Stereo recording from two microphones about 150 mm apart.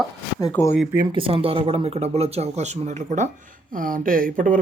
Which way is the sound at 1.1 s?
35° right (ahead or behind).